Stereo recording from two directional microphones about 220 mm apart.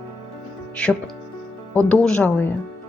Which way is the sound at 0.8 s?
5° left (ahead or behind).